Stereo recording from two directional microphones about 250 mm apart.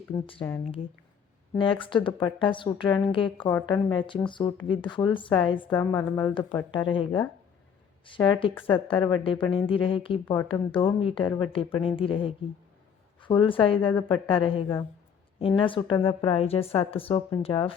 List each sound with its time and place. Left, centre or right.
0.1 s speech: centre
1.5 s a woman's voice: left
5.9 s speech: centre
6.3 s a woman's voice: centre